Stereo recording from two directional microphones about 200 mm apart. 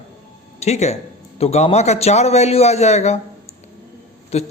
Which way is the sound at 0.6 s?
35° left (ahead or behind).